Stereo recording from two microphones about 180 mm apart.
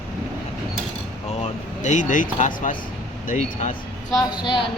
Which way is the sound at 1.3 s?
40° left (ahead or behind).